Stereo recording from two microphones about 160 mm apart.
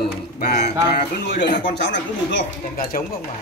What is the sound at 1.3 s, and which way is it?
Speech, 90° left.